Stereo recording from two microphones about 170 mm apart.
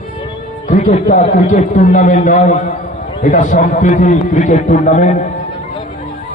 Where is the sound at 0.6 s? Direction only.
45° left (ahead or behind).